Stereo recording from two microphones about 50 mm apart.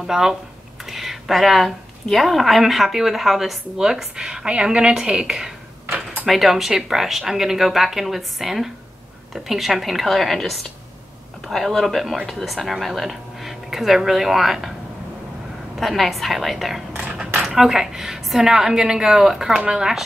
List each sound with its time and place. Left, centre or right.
0.0 s a woman's voice: centre
5.3 s a sound: centre
6.2 s speech: centre
15.8 s a woman's voice: centre
17.4 s a woman's voice: centre